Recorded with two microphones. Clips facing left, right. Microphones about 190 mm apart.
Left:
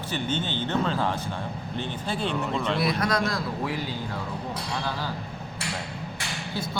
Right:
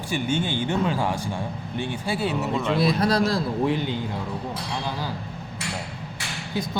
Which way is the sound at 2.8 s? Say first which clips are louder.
Right 6 dB; 30° right (ahead or behind).